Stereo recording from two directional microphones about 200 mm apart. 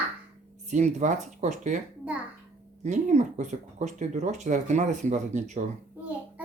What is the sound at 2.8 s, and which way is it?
Speech, 35° right (ahead or behind).